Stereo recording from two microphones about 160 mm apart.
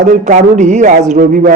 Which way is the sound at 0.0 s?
55° right (ahead or behind).